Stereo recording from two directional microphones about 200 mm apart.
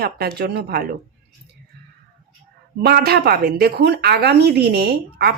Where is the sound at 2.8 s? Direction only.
50° right (ahead or behind).